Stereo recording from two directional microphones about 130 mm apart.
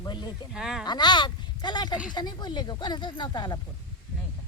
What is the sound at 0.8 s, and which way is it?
Speech, 35° left (ahead or behind).